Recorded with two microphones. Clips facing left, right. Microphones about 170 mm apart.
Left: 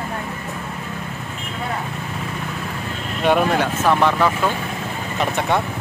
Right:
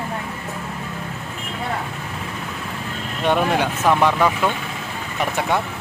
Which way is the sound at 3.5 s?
10° right (ahead or behind).